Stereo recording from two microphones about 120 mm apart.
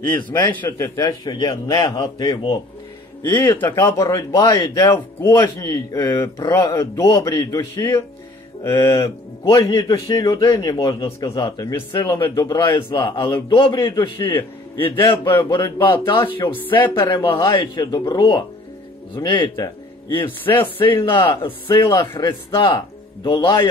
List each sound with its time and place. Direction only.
0.1 s a man's voice: 20° left (ahead or behind); by 2.6 s 35° left (ahead or behind)
3.3 s a man's voice: 15° left (ahead or behind); by 4.8 s 35° left (ahead or behind)
4.8 s a man's voice: 25° left (ahead or behind)
8.7 s a man's voice: 40° left (ahead or behind)
9.7 s a man's voice: 30° left (ahead or behind)
21.7 s a man's voice: 30° left (ahead or behind)